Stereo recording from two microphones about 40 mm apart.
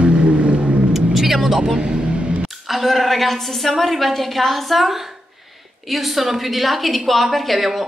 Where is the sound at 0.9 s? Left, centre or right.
Centre; by 2.5 s right.